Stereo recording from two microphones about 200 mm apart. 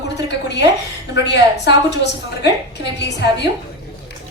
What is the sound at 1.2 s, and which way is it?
Speech, 60° left (ahead or behind).